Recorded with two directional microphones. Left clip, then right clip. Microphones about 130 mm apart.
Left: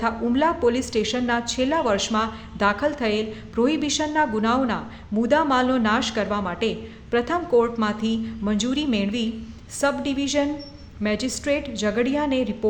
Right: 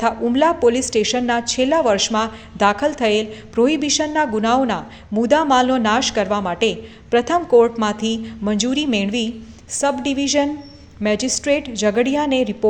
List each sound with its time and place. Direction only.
0.0 s a woman's voice: 25° right (ahead or behind)